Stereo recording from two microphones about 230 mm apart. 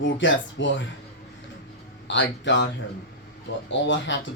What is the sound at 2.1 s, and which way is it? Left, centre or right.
Speech, left.